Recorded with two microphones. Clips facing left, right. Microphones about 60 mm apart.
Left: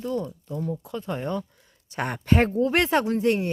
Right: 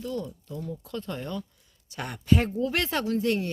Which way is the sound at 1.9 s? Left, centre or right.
Left.